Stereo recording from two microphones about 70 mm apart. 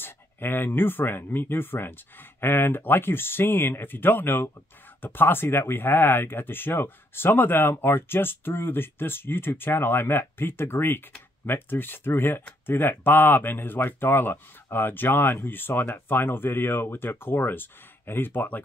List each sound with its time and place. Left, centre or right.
0.0 s speech: left